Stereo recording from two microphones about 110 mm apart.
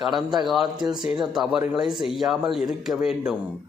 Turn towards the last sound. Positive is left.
turn(degrees=-5)  # may be behind; listen again after turning